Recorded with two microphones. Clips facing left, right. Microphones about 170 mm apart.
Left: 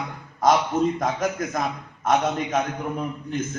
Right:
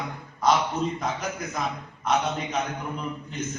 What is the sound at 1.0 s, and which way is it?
A man's voice, 45° left (ahead or behind).